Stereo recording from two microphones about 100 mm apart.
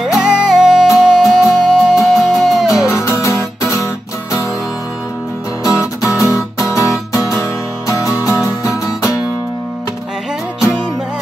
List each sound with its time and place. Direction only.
0.0 s music: 5° right (ahead or behind)
2.9 s music: 25° left (ahead or behind)
5.6 s music: 30° left (ahead or behind)